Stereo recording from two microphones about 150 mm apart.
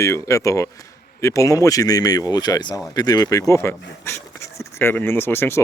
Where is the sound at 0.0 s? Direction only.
20° left (ahead or behind).